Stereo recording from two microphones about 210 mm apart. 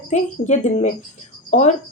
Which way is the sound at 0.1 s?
35° left (ahead or behind).